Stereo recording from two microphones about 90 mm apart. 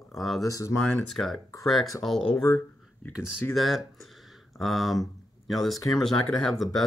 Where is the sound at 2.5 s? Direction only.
35° left (ahead or behind).